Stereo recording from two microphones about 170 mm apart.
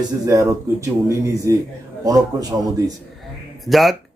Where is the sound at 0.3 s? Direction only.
20° right (ahead or behind).